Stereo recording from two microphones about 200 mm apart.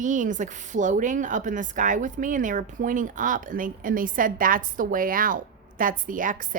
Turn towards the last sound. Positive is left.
turn(degrees=-40)  # may be behind; listen again after turning